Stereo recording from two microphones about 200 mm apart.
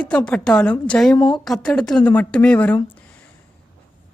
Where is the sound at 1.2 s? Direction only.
20° left (ahead or behind).